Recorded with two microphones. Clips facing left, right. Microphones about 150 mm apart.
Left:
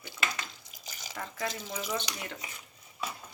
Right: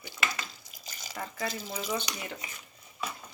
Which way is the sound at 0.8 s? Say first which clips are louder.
Even; 15° left (ahead or behind).